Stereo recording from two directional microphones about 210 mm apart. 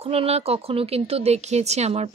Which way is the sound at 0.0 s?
30° right (ahead or behind).